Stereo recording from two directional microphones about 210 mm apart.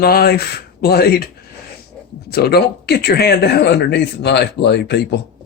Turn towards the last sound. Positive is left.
turn(degrees=55)  # may be behind; listen again after turning